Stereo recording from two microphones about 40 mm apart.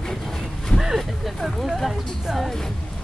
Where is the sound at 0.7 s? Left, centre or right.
Centre.